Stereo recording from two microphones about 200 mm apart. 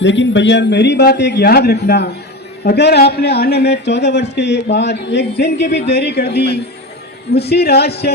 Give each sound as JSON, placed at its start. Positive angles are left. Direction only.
{"t": 0.0, "sound": "a man's voice", "side_deg": 65}